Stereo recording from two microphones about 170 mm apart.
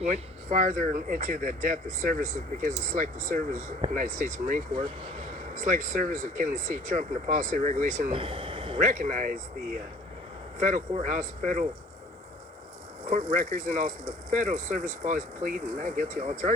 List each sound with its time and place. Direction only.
0.0 s speech: 45° right (ahead or behind)
8.1 s a sound: 30° right (ahead or behind)
8.8 s speech: 50° right (ahead or behind)
10.6 s speech: 50° right (ahead or behind)
13.1 s speech: 45° right (ahead or behind)